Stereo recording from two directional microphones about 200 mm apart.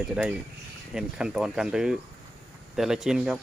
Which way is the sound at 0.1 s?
5° right (ahead or behind).